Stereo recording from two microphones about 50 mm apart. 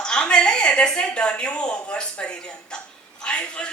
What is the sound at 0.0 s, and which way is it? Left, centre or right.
Speech, centre.